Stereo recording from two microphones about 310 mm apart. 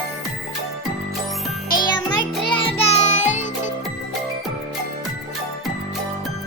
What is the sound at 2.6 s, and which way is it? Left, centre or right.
Music, centre.